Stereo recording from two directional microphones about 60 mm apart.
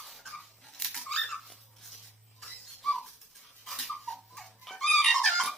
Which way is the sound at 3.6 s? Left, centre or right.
Centre.